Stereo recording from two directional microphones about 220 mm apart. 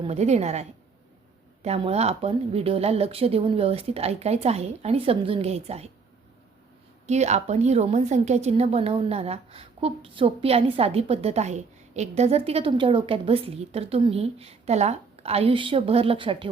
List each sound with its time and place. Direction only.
0.0 s a woman's voice: 30° right (ahead or behind)
7.1 s a woman's voice: 30° right (ahead or behind)